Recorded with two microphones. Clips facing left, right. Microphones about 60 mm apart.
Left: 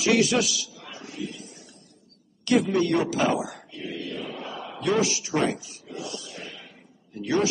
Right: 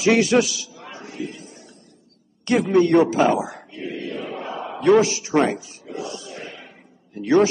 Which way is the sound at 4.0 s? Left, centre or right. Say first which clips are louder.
Right 4 dB; right.